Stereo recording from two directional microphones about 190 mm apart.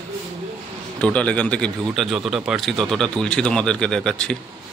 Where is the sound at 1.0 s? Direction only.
5° left (ahead or behind).